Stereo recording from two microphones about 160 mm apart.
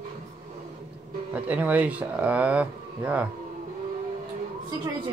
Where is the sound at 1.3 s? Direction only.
10° right (ahead or behind).